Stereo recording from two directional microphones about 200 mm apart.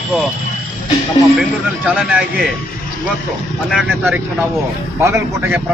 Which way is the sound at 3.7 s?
5° right (ahead or behind).